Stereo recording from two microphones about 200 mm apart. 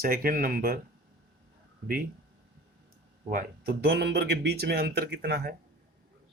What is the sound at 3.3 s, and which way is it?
Speech, 50° right (ahead or behind).